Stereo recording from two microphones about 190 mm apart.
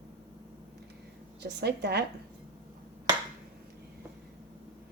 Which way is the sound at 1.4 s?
60° right (ahead or behind).